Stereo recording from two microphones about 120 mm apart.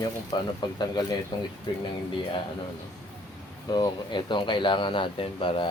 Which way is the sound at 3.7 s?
40° left (ahead or behind).